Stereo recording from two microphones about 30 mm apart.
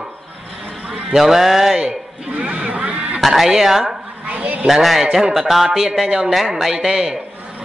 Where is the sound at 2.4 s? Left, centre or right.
Right.